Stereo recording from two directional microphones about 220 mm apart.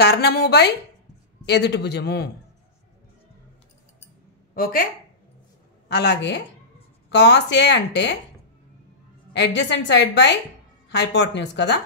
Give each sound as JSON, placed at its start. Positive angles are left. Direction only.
{"t": 0.0, "sound": "a woman's voice", "side_deg": 50}
{"t": 5.9, "sound": "a woman's voice", "side_deg": 50}
{"t": 9.3, "sound": "a woman's voice", "side_deg": 50}